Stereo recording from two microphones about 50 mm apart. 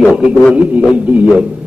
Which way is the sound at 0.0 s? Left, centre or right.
Right.